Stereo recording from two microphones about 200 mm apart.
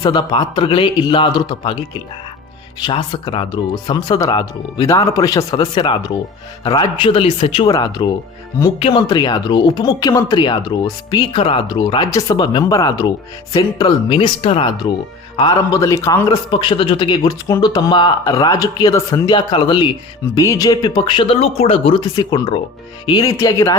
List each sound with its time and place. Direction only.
0.0 s speech: 20° left (ahead or behind)